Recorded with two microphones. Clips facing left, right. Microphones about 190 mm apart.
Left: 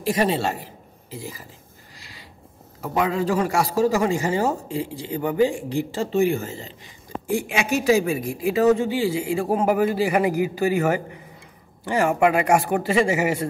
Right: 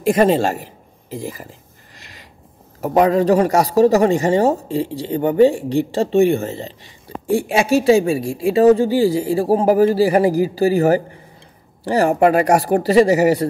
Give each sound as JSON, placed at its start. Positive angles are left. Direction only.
{"t": 0.1, "sound": "a man's voice", "side_deg": -50}
{"t": 2.8, "sound": "speech", "side_deg": -45}